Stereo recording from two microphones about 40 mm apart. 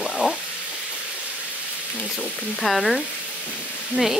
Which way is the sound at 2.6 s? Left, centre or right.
Centre.